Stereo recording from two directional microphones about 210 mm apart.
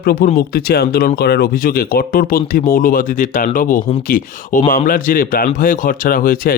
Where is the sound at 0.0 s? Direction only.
45° left (ahead or behind).